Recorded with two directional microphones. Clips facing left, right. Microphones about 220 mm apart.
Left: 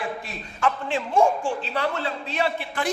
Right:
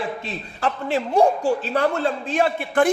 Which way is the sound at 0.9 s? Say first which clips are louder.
Right 4 dB; 40° right (ahead or behind).